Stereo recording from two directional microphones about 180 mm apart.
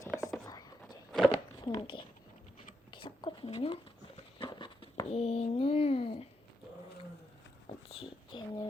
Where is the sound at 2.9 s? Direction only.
25° left (ahead or behind).